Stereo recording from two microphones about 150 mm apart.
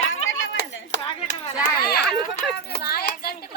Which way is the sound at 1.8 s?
90° left.